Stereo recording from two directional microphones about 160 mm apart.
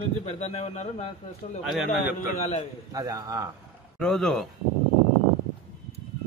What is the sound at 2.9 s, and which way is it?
Speech, 20° right (ahead or behind).